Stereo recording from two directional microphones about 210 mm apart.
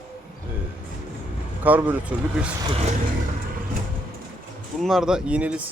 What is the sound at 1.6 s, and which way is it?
Speech, 10° right (ahead or behind).